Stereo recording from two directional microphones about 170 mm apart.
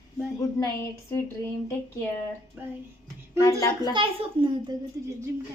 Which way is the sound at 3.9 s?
30° right (ahead or behind).